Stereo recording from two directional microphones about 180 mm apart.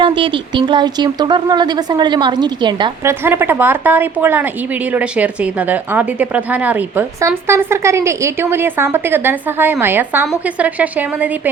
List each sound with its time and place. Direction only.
0.0 s speech: 30° right (ahead or behind)
3.0 s a woman's voice: 15° right (ahead or behind)